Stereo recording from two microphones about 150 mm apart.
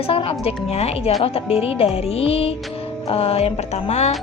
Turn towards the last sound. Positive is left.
turn(degrees=45)  # may be behind; listen again after turning